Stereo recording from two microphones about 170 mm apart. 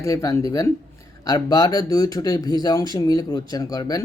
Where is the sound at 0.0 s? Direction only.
20° left (ahead or behind).